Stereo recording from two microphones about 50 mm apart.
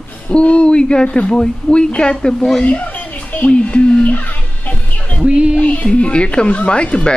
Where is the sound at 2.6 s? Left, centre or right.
Left.